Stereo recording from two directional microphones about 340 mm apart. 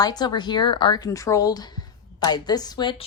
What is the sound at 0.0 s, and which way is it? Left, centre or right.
A woman's voice, centre.